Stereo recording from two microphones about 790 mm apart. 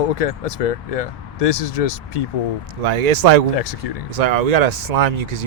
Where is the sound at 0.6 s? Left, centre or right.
Left.